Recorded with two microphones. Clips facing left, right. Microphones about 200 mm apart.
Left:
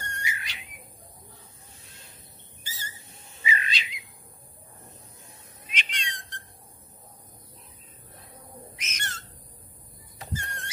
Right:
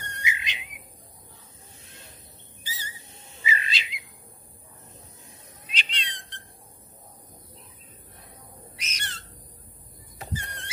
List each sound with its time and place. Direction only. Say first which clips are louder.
0.0 s whistle: right 2 dB; 20° right (ahead or behind)
2.6 s a sound: right 2 dB; 45° left (ahead or behind)
2.9 s whistling: right 2 dB; 25° right (ahead or behind)
5.7 s cat: even; 35° right (ahead or behind)
8.7 s bird: even; 35° right (ahead or behind)
10.3 s rodents: left 1 dB; 45° left (ahead or behind)